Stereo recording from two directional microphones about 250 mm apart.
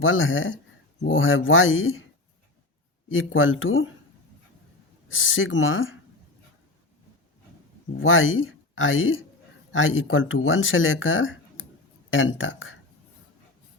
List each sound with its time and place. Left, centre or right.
0.0 s speech: left
3.1 s speech: left
5.0 s speech: left
7.9 s speech: left